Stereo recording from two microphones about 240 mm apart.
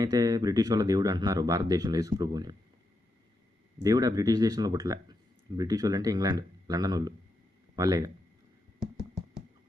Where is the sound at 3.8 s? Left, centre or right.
Centre.